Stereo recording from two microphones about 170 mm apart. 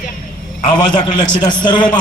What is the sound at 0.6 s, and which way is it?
Speech, 25° left (ahead or behind).